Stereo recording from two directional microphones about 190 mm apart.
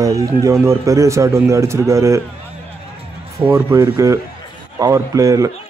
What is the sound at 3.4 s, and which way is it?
A man's voice, 15° right (ahead or behind).